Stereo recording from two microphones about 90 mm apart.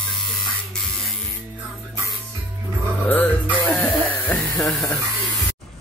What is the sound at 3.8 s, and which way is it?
Cough, 20° left (ahead or behind).